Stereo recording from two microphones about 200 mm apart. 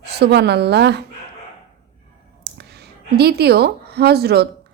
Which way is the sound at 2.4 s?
55° right (ahead or behind).